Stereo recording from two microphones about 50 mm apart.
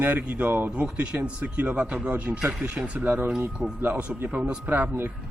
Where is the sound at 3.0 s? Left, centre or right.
Right.